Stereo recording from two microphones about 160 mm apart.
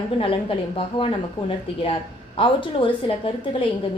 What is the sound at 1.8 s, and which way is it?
A woman's voice, 35° left (ahead or behind).